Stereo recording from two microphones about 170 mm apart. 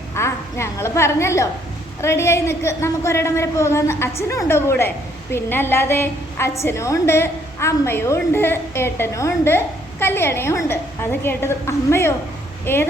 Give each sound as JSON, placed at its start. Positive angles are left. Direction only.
{"t": 0.1, "sound": "a woman's voice", "side_deg": 15}